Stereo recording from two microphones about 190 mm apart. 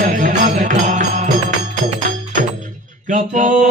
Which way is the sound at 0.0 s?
45° right (ahead or behind).